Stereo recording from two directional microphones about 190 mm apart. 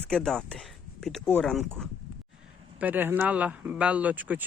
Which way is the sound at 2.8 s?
10° right (ahead or behind).